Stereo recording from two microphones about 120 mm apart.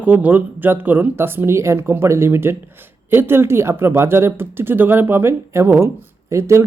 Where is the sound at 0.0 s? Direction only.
15° right (ahead or behind).